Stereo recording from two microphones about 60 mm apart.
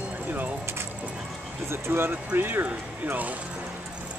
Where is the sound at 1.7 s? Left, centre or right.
Right.